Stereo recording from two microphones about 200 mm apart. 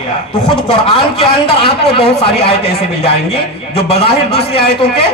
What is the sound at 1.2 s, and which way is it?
A man's voice, 30° left (ahead or behind).